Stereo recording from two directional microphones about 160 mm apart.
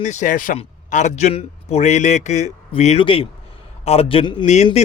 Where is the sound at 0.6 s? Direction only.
45° left (ahead or behind).